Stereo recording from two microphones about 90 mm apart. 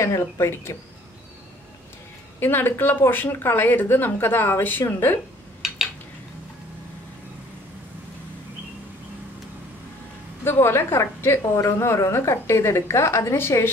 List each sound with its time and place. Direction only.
0.0 s a woman's voice: 30° left (ahead or behind)
2.4 s a woman's voice: 25° left (ahead or behind)
10.4 s a woman's voice: 25° left (ahead or behind)